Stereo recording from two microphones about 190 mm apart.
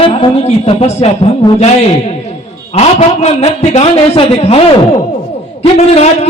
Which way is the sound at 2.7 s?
35° left (ahead or behind).